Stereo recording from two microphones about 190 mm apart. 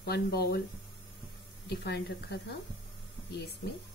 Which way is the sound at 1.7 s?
60° left (ahead or behind).